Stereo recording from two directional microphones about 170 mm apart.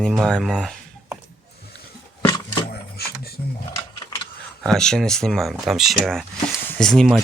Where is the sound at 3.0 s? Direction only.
70° left (ahead or behind).